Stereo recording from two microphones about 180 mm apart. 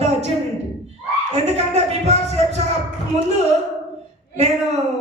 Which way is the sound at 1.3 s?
35° right (ahead or behind).